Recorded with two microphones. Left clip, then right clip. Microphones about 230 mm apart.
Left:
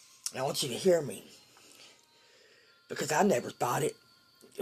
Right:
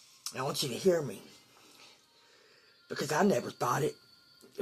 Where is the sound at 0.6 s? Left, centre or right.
Left.